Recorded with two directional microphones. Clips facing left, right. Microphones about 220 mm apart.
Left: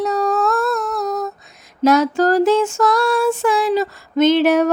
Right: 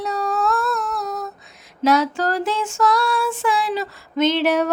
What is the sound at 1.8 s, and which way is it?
Female singing, 45° left (ahead or behind).